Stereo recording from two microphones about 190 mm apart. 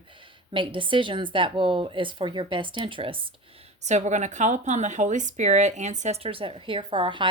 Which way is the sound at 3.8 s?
35° right (ahead or behind).